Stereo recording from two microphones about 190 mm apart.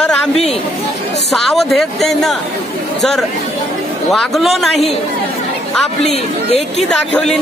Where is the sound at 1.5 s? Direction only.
Centre (ahead or behind).